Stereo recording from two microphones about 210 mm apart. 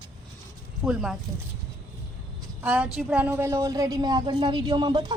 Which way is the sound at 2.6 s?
5° right (ahead or behind).